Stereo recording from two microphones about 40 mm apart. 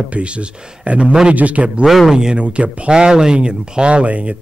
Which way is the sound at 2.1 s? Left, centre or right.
Right.